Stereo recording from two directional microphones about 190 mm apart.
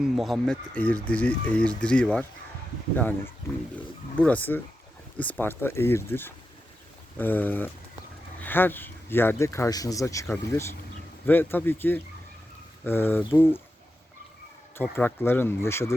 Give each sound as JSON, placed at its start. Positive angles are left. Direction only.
{"t": 0.0, "sound": "speech", "side_deg": 0}
{"t": 3.8, "sound": "speech", "side_deg": 10}
{"t": 14.8, "sound": "speech", "side_deg": 10}